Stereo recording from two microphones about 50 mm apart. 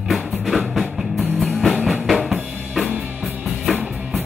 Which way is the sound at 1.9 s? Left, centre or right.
Centre.